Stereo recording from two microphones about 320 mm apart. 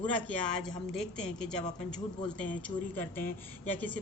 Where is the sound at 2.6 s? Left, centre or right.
Centre.